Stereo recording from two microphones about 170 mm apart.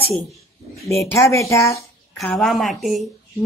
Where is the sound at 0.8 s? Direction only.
15° left (ahead or behind).